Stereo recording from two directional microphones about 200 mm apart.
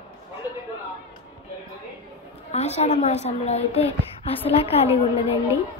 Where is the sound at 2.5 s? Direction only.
35° left (ahead or behind).